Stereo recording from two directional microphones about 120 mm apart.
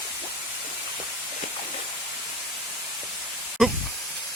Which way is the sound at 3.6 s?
5° right (ahead or behind).